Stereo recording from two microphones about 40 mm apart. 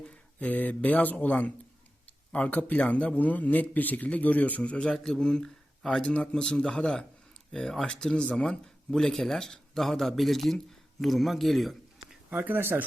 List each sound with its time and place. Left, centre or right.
0.3 s a man's voice: left
5.2 s speech: centre
7.5 s speech: centre
7.8 s speech: left
8.4 s speech: centre
12.3 s speech: right